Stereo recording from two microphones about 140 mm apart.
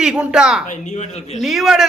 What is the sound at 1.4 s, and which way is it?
Speech, centre (ahead or behind).